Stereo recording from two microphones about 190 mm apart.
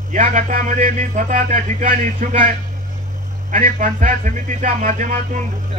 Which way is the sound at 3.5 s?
40° right (ahead or behind).